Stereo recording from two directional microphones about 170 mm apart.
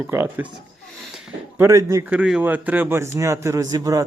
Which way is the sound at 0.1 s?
15° right (ahead or behind).